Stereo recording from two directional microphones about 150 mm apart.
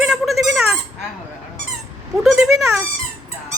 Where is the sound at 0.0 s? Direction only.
Centre (ahead or behind).